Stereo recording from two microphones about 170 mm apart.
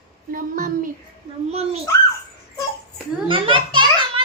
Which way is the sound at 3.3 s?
30° right (ahead or behind).